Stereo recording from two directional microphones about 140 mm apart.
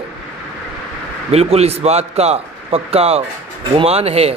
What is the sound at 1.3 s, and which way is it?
A man's voice, 50° right (ahead or behind).